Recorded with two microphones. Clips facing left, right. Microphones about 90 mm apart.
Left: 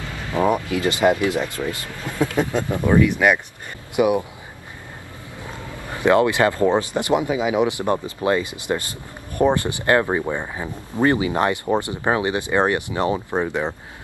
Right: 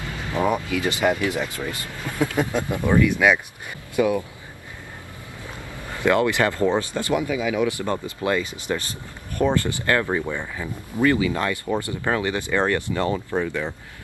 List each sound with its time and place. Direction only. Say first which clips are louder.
0.3 s speech: left 3 dB; 20° left (ahead or behind)
5.9 s speech: left 3 dB; 20° left (ahead or behind)